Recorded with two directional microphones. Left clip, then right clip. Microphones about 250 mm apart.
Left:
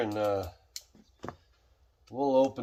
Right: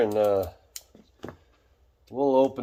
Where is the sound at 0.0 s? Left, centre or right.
Right.